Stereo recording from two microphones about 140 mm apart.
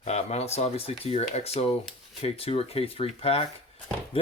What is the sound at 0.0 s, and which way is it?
Speech, 55° left (ahead or behind).